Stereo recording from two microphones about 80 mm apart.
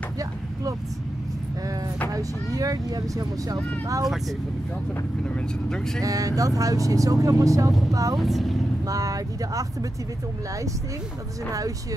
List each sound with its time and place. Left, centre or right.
2.1 s speech: right
4.0 s speech: centre
5.2 s speech: centre
5.9 s speech: right
8.2 s speech: centre
8.8 s speech: right